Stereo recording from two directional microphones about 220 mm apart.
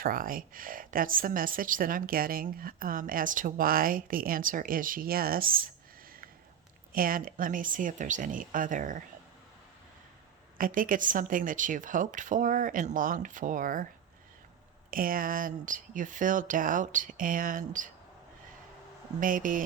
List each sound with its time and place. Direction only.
0.0 s a woman's voice: 40° right (ahead or behind)
6.9 s a woman's voice: 40° right (ahead or behind)
10.6 s a woman's voice: 40° right (ahead or behind)
14.8 s a woman's voice: 40° right (ahead or behind)
19.2 s a woman's voice: 40° right (ahead or behind)